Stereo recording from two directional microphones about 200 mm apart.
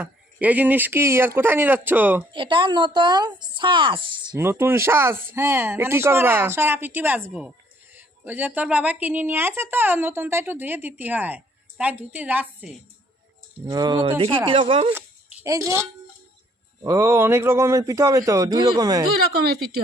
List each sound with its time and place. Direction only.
0.0 s a woman's voice: 5° right (ahead or behind)
2.3 s speech: 25° right (ahead or behind)
4.4 s a woman's voice: 10° right (ahead or behind)
13.7 s speech: 20° right (ahead or behind)
14.9 s a sound: 15° right (ahead or behind)
16.8 s a woman's voice: 15° right (ahead or behind)